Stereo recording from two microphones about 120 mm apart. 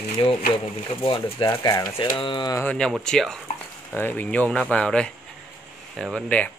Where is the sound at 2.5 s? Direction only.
15° left (ahead or behind).